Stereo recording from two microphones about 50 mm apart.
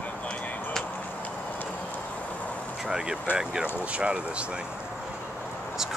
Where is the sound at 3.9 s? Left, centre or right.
Right.